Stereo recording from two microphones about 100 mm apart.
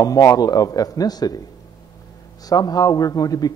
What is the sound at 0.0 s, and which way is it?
Speech, 35° left (ahead or behind).